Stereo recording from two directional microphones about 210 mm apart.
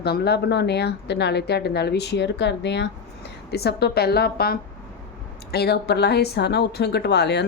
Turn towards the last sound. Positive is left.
turn(degrees=55)  # may be behind; listen again after turning